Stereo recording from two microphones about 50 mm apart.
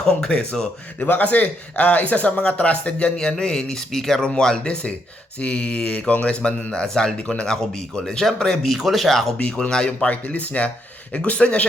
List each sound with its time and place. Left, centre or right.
0.0 s speech: centre
0.9 s speech: left; by 9.3 s centre
9.5 s speech: centre
10.1 s speech: left